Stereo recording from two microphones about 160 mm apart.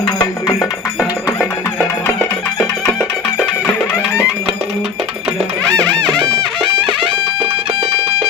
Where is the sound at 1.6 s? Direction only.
15° left (ahead or behind).